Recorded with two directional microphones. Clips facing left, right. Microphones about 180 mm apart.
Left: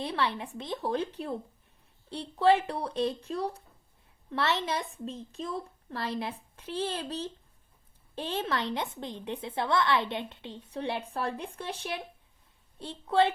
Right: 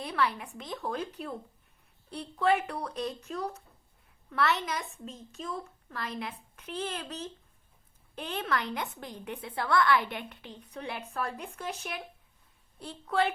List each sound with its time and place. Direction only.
0.0 s a woman's voice: 25° left (ahead or behind)